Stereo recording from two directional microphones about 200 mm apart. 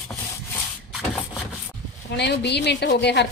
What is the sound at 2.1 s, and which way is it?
A woman's voice, 55° left (ahead or behind).